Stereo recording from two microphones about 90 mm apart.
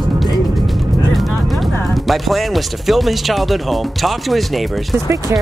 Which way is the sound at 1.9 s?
Centre (ahead or behind).